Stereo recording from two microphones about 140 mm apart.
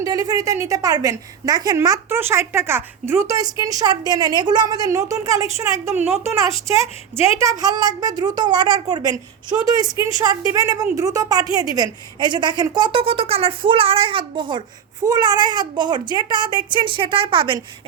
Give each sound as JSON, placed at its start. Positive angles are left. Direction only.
{"t": 0.0, "sound": "a woman's voice", "side_deg": -25}